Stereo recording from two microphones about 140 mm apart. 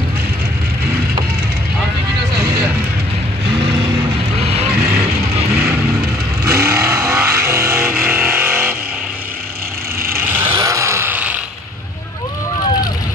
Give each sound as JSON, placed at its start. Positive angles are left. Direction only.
{"t": 4.4, "sound": "vehicle", "side_deg": -45}
{"t": 6.4, "sound": "vehicle", "side_deg": -20}
{"t": 10.1, "sound": "a sound", "side_deg": -15}